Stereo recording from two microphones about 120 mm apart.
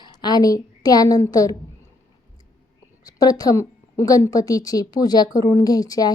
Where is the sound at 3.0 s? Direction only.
30° left (ahead or behind).